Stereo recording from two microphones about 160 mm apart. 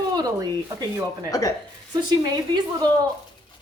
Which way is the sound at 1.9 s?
25° right (ahead or behind).